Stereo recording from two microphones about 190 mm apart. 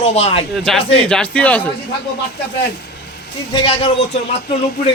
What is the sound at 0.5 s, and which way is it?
Speech, centre (ahead or behind).